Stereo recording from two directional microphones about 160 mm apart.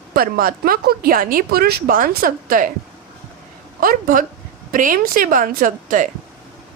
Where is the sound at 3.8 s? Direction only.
60° right (ahead or behind).